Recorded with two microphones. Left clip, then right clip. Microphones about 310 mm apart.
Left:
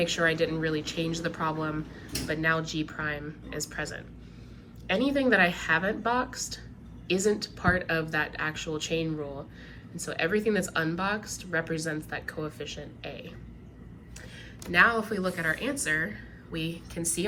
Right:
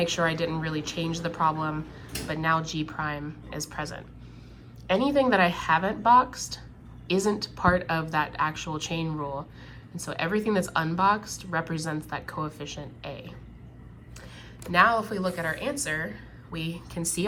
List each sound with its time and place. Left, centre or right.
0.0 s a woman's voice: centre
14.7 s a woman's voice: centre